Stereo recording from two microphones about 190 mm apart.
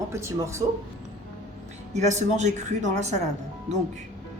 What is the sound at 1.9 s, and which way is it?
Speech, 35° right (ahead or behind).